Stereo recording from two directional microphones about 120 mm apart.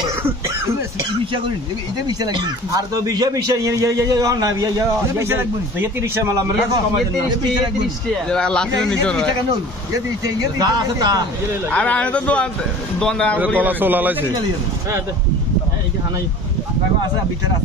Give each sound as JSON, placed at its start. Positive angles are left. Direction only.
{"t": 2.0, "sound": "a man's voice", "side_deg": -35}
{"t": 8.3, "sound": "a man's voice", "side_deg": 5}
{"t": 10.2, "sound": "speech", "side_deg": -30}
{"t": 11.7, "sound": "speech", "side_deg": 10}
{"t": 13.6, "sound": "a man's voice", "side_deg": -15}